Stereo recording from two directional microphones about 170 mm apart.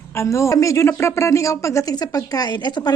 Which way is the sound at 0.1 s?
15° left (ahead or behind).